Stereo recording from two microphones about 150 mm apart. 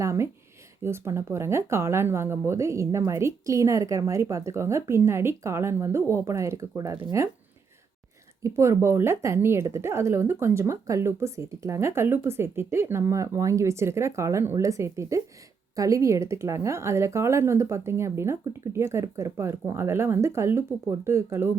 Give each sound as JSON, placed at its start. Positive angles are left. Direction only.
{"t": 0.0, "sound": "a woman's voice", "side_deg": -20}
{"t": 8.4, "sound": "a woman's voice", "side_deg": -20}